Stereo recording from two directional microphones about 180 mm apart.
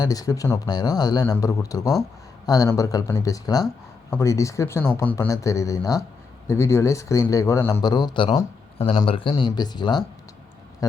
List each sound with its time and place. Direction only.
0.0 s speech: 20° left (ahead or behind)